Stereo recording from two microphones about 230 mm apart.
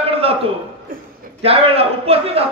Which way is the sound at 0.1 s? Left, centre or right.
Right.